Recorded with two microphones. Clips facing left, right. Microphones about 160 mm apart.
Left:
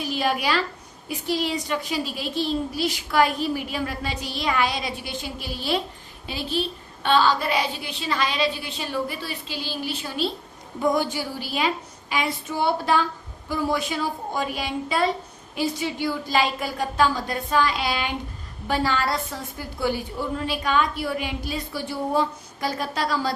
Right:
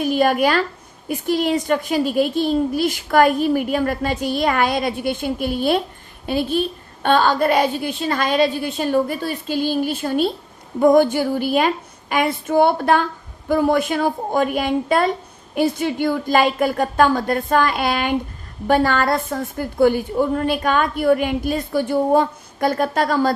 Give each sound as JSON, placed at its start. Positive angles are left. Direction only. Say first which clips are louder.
{"t": 0.0, "sound": "a woman's voice", "louder": "right 8 dB", "side_deg": -50}